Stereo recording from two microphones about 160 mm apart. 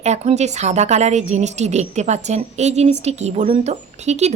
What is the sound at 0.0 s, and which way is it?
Speech, 45° right (ahead or behind).